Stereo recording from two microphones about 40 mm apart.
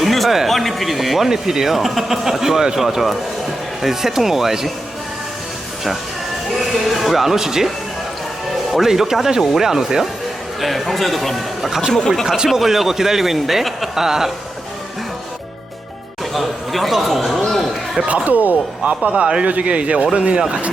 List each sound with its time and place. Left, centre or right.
0.0 s a sound: centre
0.4 s a man's voice: centre
6.6 s speech: centre
8.7 s a man's voice: centre
10.6 s speech: centre
12.5 s a man's voice: centre
16.3 s a sound: centre
18.0 s a man's voice: right